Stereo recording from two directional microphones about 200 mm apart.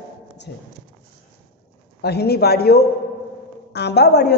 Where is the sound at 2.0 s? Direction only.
55° left (ahead or behind).